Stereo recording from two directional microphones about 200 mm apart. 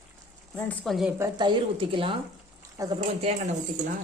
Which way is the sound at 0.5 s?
10° left (ahead or behind).